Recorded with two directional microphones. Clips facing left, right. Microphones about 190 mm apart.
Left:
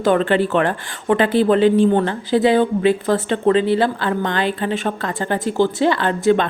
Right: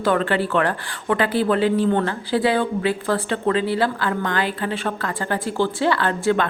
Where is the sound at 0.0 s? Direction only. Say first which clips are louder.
Left 4 dB; 20° left (ahead or behind).